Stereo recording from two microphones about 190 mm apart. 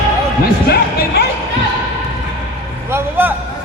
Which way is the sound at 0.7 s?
55° left (ahead or behind).